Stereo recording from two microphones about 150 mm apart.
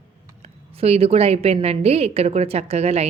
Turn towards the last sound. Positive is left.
turn(degrees=-45)  # may be behind; listen again after turning